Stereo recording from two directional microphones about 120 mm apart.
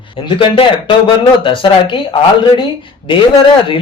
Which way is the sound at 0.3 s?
45° left (ahead or behind).